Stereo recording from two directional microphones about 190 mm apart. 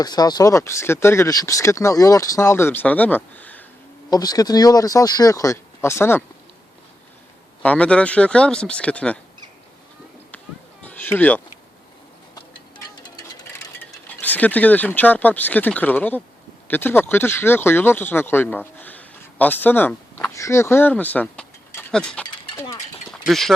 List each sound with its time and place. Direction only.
0.0 s speech: 20° left (ahead or behind)
4.1 s speech: 20° left (ahead or behind)
7.6 s speech: 5° left (ahead or behind)
10.8 s cat: 10° left (ahead or behind)
12.3 s music: 20° left (ahead or behind)
13.7 s speech: 10° left (ahead or behind)
22.5 s a sound: 15° left (ahead or behind)
23.2 s speech: centre (ahead or behind)